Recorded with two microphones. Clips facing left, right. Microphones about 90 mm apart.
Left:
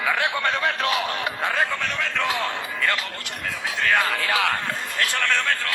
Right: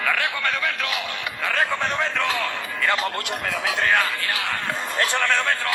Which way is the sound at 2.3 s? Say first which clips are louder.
Even; 25° left (ahead or behind).